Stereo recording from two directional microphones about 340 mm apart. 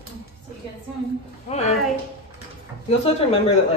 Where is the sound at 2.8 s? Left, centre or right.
Centre.